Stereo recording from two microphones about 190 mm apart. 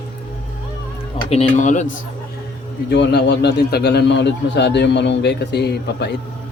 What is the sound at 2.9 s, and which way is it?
A man's voice, 60° left (ahead or behind).